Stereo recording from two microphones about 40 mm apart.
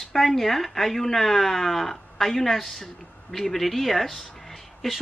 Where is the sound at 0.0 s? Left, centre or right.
Centre.